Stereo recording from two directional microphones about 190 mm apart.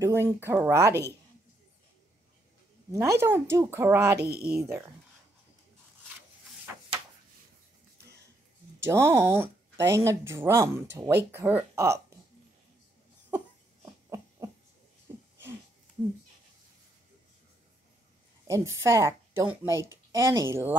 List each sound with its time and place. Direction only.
0.0 s speech: 15° right (ahead or behind)
2.9 s speech: 15° right (ahead or behind)
8.7 s speech: 15° right (ahead or behind)
18.5 s speech: 15° right (ahead or behind)